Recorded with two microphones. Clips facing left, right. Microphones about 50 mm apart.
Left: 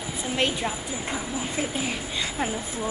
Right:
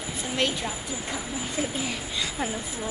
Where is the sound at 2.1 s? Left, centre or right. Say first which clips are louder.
Left 1 dB; left.